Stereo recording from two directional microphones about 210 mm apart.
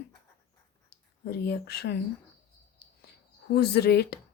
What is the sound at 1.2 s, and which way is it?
Speech, 50° left (ahead or behind).